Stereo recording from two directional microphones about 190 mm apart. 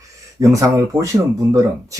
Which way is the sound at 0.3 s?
15° right (ahead or behind).